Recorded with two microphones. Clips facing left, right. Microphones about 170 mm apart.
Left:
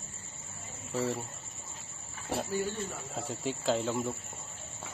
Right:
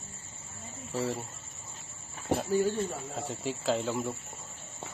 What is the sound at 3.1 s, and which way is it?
Speech, centre (ahead or behind).